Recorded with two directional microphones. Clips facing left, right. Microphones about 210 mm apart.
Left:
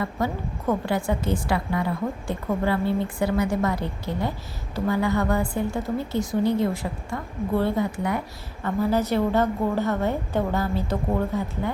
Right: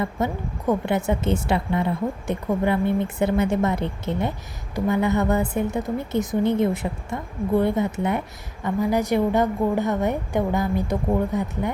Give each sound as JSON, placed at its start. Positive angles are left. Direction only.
{"t": 0.2, "sound": "a woman's voice", "side_deg": -20}